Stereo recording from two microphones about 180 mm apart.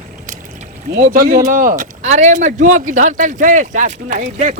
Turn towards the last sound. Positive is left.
turn(degrees=-45)  # may be behind; listen again after turning